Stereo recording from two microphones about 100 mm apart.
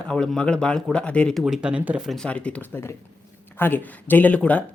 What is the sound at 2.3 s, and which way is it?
Speech, 10° left (ahead or behind).